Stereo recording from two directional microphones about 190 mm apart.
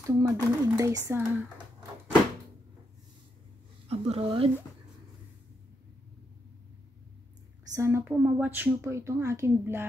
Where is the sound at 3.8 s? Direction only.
30° right (ahead or behind).